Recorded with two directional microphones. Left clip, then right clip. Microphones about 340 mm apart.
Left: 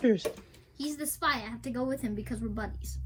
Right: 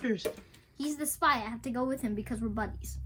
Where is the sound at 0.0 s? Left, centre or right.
Centre.